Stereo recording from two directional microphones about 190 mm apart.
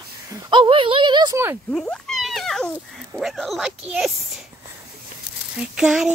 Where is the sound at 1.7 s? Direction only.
5° left (ahead or behind).